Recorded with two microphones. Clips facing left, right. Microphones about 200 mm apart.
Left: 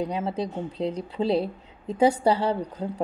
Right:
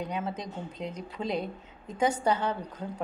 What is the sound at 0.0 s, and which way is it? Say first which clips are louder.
A woman's voice: left 6 dB; 30° left (ahead or behind).